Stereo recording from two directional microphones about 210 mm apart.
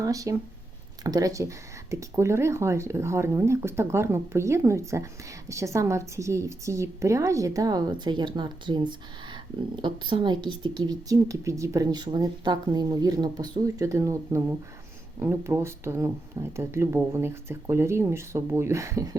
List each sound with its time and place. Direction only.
0.0 s a woman's voice: 15° right (ahead or behind)